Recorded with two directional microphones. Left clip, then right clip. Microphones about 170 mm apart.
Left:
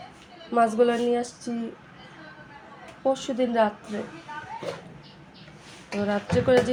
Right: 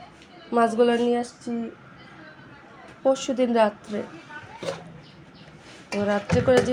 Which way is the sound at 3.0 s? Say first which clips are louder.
Right 3 dB; 25° right (ahead or behind).